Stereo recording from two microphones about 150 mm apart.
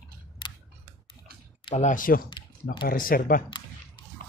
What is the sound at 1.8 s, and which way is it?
Speech, 60° left (ahead or behind).